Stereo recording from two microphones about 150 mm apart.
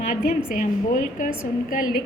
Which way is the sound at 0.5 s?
65° left (ahead or behind).